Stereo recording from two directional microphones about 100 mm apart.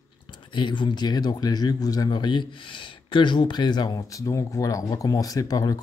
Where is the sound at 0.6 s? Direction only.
50° left (ahead or behind).